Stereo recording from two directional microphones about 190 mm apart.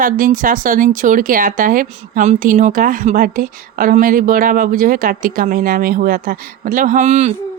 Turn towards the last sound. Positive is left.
turn(degrees=-35)  # may be behind; listen again after turning